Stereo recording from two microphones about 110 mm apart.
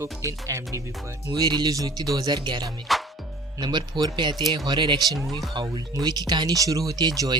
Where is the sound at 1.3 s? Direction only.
40° right (ahead or behind).